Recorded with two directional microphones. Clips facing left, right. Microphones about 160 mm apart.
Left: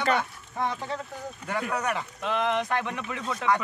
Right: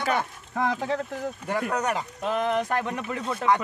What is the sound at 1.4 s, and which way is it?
Speech, 25° right (ahead or behind).